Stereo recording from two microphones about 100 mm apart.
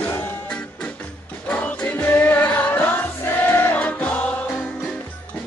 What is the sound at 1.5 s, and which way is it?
Music, 15° left (ahead or behind).